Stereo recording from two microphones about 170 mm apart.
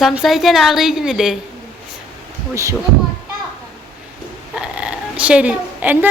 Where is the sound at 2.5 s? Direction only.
20° right (ahead or behind).